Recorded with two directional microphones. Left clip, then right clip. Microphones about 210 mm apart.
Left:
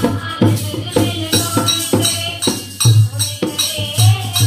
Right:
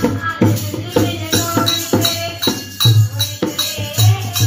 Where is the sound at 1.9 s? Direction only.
20° right (ahead or behind).